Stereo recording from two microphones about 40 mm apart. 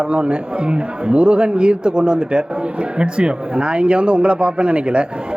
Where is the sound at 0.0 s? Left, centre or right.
Right.